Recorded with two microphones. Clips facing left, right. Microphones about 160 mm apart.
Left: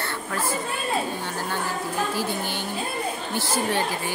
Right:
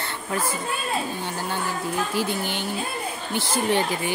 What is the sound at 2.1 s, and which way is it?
Speech, 15° right (ahead or behind).